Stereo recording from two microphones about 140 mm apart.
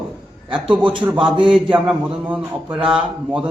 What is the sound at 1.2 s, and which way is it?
A man's voice, 5° right (ahead or behind).